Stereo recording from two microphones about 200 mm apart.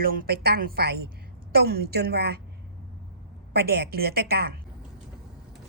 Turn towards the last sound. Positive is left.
turn(degrees=-50)  # may be behind; listen again after turning